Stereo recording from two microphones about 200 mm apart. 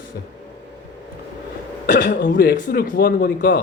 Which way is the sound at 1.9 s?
45° left (ahead or behind).